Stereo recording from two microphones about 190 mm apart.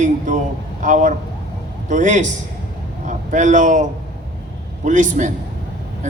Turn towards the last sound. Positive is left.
turn(degrees=-40)  # may be behind; listen again after turning